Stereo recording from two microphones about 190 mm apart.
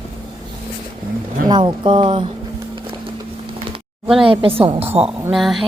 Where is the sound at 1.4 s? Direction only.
25° right (ahead or behind).